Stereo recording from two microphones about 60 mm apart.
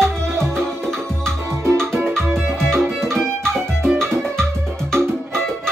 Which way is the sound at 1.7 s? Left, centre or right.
Right.